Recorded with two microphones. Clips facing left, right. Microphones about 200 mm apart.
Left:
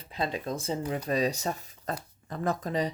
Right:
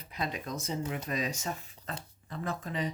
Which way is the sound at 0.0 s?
30° left (ahead or behind).